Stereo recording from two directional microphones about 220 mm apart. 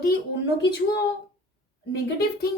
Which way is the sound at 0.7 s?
50° left (ahead or behind).